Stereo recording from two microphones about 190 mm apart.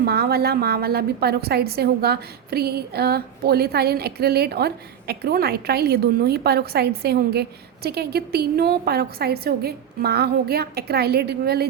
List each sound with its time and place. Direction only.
0.0 s a woman's voice: 55° right (ahead or behind)